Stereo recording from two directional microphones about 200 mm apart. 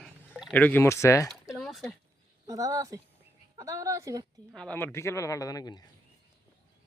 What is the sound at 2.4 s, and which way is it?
Speech, 15° right (ahead or behind).